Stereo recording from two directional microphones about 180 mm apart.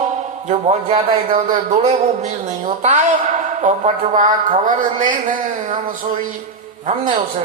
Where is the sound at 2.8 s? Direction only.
40° right (ahead or behind).